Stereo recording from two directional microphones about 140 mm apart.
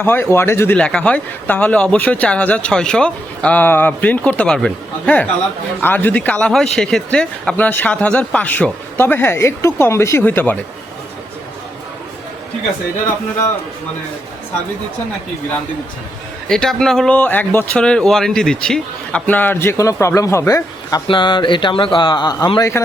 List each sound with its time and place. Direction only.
0.0 s speech: 15° left (ahead or behind)
0.8 s speech: 5° left (ahead or behind)
16.5 s speech: 5° left (ahead or behind); by 22.7 s 25° left (ahead or behind)